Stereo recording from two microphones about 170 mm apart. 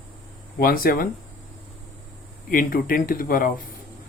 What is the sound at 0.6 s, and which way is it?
Speech, 60° left (ahead or behind).